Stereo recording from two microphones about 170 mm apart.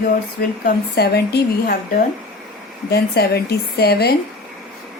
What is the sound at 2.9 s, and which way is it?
A woman's voice, 70° left (ahead or behind).